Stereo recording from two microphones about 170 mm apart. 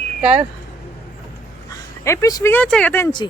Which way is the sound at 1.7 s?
20° left (ahead or behind).